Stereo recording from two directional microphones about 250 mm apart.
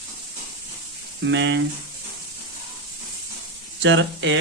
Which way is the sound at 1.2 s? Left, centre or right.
Right.